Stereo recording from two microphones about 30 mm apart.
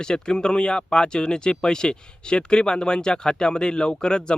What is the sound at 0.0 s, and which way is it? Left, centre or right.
Speech, left.